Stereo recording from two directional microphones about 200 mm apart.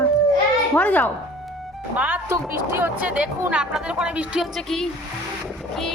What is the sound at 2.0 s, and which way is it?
A woman's voice, 10° right (ahead or behind).